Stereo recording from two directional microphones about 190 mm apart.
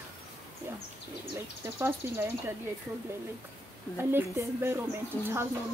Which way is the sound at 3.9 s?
15° right (ahead or behind).